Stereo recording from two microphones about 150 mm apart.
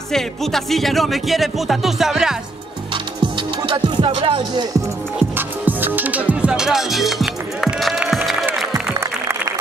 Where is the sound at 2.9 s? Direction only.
35° right (ahead or behind).